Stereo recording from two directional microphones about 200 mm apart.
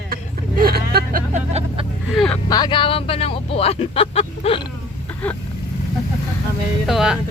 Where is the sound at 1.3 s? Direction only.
30° right (ahead or behind).